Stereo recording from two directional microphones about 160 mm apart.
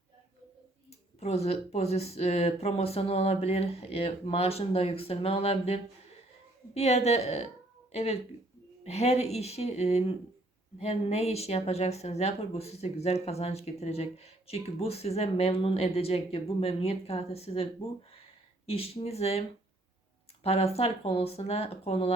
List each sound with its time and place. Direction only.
1.2 s a woman's voice: 40° left (ahead or behind)